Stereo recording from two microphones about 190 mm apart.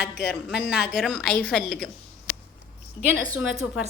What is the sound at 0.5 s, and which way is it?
Speech, 60° left (ahead or behind).